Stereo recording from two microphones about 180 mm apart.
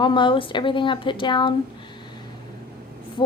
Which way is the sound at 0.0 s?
25° left (ahead or behind).